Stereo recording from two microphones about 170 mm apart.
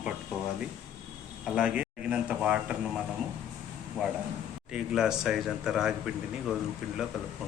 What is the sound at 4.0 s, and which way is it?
Speech, 5° left (ahead or behind).